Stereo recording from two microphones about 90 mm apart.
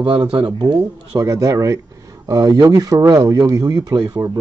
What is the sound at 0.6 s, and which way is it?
Speech, 50° right (ahead or behind).